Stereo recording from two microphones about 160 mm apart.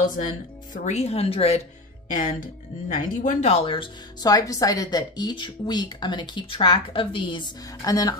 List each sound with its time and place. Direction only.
0.0 s speech: 55° left (ahead or behind)
0.7 s speech: 45° left (ahead or behind)
2.1 s speech: 50° left (ahead or behind)
3.6 s speech: 30° left (ahead or behind)